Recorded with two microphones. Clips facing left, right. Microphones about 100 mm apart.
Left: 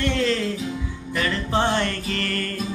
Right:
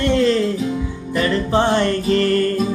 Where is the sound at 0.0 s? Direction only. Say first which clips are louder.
Right 7 dB; 15° right (ahead or behind).